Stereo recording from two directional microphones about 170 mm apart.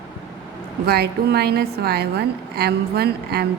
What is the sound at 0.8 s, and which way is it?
A woman's voice, 70° right (ahead or behind).